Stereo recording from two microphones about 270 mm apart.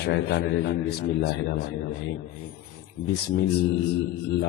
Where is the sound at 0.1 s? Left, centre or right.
Left.